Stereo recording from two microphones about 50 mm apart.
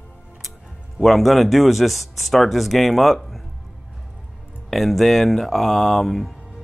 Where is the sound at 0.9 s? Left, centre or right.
Centre.